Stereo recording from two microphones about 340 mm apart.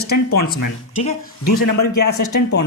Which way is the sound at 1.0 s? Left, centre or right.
Left.